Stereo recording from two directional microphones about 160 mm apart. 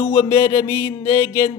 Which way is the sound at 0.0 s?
15° left (ahead or behind).